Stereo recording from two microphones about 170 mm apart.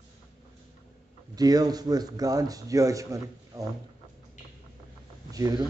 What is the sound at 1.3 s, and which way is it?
Speech, 20° right (ahead or behind).